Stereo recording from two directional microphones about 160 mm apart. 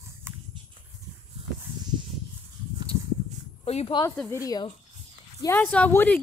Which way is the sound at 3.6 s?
40° left (ahead or behind).